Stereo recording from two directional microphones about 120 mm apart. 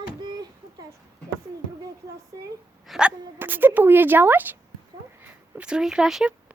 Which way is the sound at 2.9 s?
10° right (ahead or behind).